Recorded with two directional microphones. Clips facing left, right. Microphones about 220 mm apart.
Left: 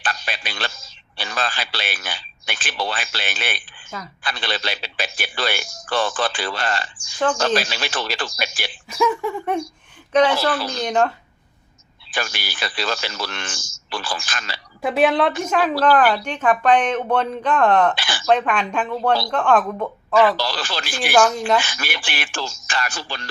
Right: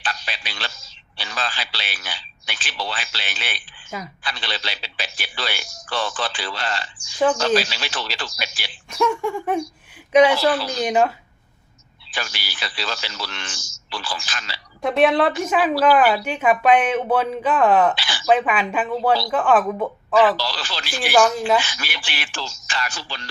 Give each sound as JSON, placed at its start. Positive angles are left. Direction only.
{"t": 0.0, "sound": "a man's voice", "side_deg": 50}
{"t": 8.9, "sound": "a woman's voice", "side_deg": 0}
{"t": 10.1, "sound": "speech", "side_deg": -10}
{"t": 12.1, "sound": "a man's voice", "side_deg": 50}
{"t": 14.8, "sound": "a woman's voice", "side_deg": 5}
{"t": 17.9, "sound": "a sound", "side_deg": 50}
{"t": 18.3, "sound": "a woman's voice", "side_deg": -5}
{"t": 20.3, "sound": "a man's voice", "side_deg": 50}
{"t": 21.0, "sound": "a woman's voice", "side_deg": 0}
{"t": 21.6, "sound": "a man's voice", "side_deg": 50}